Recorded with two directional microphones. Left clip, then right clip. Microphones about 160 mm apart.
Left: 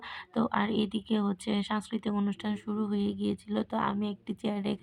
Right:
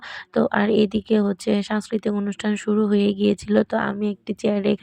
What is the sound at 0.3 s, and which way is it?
Speech, 45° right (ahead or behind).